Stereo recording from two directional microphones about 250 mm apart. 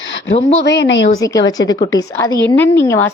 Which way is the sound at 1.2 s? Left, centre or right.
Centre.